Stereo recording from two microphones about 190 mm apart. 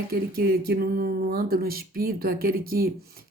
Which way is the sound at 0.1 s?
55° right (ahead or behind).